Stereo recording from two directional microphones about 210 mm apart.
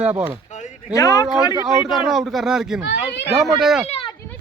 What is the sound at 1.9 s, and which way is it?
Speech, centre (ahead or behind).